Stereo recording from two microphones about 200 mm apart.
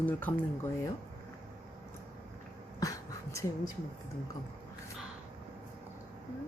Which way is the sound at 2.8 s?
15° left (ahead or behind).